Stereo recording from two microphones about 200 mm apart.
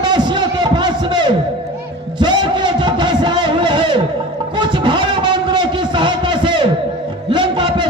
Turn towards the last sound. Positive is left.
turn(degrees=-25)  # may be behind; listen again after turning